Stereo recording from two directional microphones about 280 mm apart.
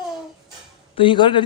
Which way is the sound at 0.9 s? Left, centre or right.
Centre.